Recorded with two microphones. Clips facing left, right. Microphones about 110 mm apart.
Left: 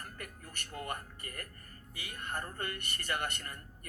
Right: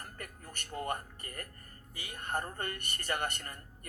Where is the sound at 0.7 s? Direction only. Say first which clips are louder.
Right 4 dB; 30° right (ahead or behind).